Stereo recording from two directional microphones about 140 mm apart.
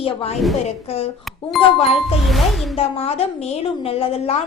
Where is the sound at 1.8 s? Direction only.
45° left (ahead or behind).